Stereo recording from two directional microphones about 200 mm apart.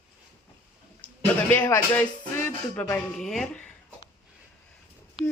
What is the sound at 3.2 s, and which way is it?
Speech, centre (ahead or behind).